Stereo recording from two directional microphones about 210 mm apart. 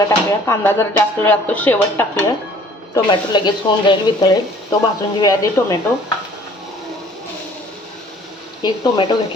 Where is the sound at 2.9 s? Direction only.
20° left (ahead or behind).